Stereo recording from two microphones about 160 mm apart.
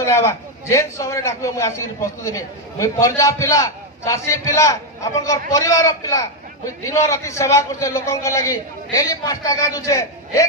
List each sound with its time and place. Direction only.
0.0 s a man's voice: 15° left (ahead or behind)